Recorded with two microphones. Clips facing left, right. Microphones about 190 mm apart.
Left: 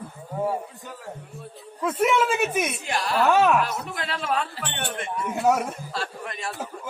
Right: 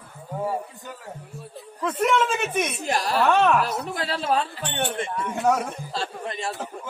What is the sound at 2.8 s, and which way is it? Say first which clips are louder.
Speech: right 2 dB; 40° right (ahead or behind).